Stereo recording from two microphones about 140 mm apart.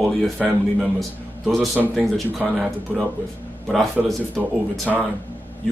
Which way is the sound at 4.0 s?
10° right (ahead or behind).